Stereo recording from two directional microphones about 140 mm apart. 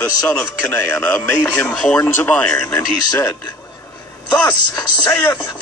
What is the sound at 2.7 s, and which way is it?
Speech, 20° left (ahead or behind).